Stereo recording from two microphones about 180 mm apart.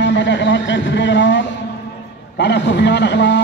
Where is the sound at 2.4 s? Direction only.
75° left (ahead or behind).